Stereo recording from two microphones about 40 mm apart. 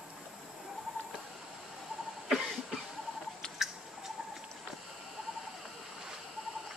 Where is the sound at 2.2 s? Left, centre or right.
Centre.